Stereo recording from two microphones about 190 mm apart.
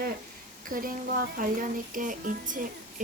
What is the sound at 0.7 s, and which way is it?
Speech, 45° right (ahead or behind).